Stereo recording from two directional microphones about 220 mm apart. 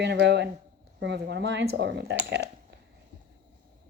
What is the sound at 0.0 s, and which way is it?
Speech, 50° right (ahead or behind).